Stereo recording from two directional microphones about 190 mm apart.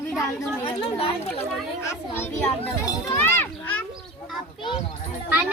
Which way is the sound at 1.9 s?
10° left (ahead or behind).